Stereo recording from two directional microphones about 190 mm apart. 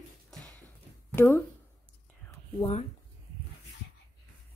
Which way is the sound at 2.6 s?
30° left (ahead or behind).